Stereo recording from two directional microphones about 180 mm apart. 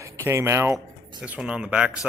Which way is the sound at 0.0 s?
15° right (ahead or behind).